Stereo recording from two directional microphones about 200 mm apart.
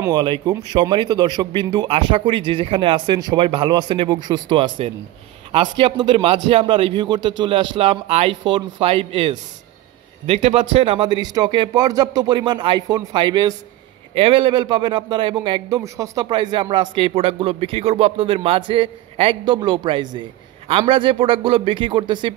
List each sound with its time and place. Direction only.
0.0 s a man's voice: 20° right (ahead or behind)